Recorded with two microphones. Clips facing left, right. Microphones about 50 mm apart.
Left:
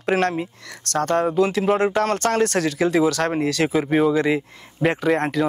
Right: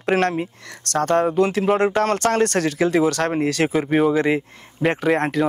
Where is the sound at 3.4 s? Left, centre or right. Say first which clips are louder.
Right 1 dB; centre.